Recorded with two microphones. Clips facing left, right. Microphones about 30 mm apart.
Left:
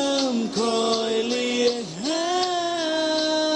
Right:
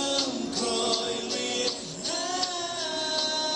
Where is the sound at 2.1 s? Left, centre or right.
Left.